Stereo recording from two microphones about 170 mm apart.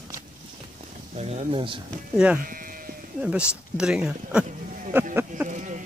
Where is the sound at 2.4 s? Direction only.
55° right (ahead or behind).